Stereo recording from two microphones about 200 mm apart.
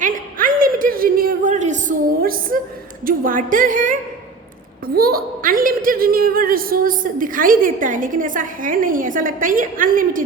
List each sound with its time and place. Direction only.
0.0 s a sound: 40° right (ahead or behind)
3.1 s a woman's voice: 40° right (ahead or behind)
4.9 s a woman's voice: 50° right (ahead or behind)